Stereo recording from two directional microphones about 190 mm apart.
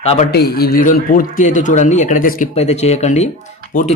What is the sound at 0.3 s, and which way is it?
A man's voice, 60° left (ahead or behind).